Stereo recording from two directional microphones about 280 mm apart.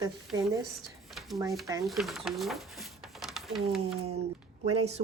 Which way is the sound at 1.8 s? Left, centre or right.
Centre.